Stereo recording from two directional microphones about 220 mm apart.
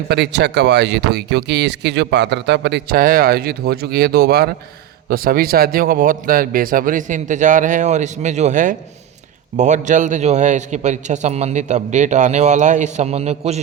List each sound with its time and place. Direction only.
0.1 s a man's voice: 50° right (ahead or behind); by 13.6 s 30° right (ahead or behind)